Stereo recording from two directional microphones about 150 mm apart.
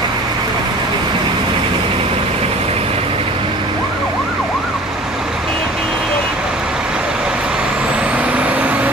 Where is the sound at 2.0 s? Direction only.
40° right (ahead or behind).